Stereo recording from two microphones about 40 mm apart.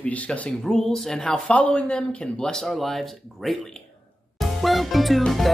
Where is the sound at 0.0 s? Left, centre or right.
Left.